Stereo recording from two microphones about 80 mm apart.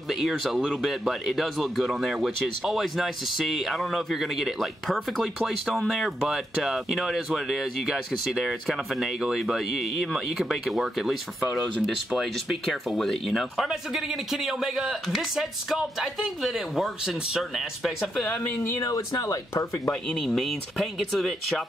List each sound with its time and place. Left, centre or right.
0.1 s speech: centre
18.3 s speech: left
18.8 s speech: left
20.2 s speech: centre